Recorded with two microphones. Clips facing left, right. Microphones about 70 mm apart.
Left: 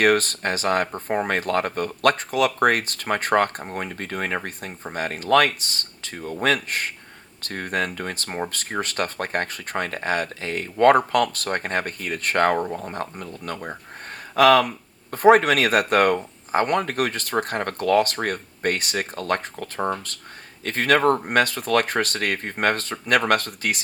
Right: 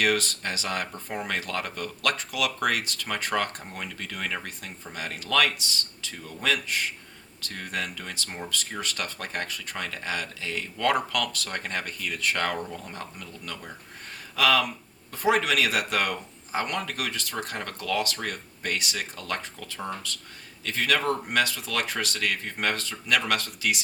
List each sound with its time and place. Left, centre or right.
0.0 s speech: left